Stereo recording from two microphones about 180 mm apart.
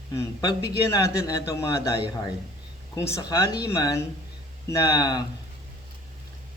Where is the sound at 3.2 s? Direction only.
20° left (ahead or behind).